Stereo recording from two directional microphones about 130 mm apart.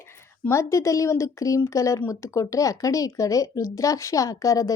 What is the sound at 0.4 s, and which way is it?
Speech, 20° left (ahead or behind).